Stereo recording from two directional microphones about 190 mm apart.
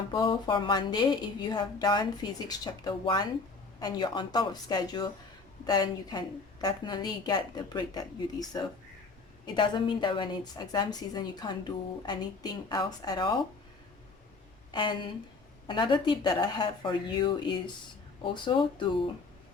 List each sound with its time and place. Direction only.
0.1 s a woman's voice: 25° left (ahead or behind)
14.7 s a woman's voice: 25° left (ahead or behind)